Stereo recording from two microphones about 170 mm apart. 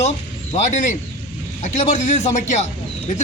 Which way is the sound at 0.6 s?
45° left (ahead or behind).